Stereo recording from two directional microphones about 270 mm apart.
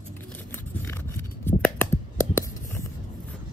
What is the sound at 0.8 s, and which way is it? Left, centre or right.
Scissors, centre.